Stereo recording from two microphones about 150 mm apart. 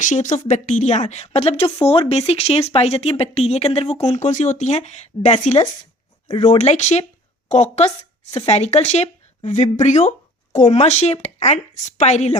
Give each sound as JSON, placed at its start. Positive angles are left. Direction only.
{"t": 0.0, "sound": "a woman's voice", "side_deg": 55}